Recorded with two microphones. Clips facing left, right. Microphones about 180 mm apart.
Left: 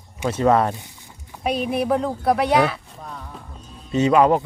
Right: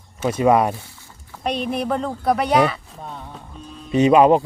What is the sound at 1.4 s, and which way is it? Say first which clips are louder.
Speech: left 1 dB; 5° left (ahead or behind).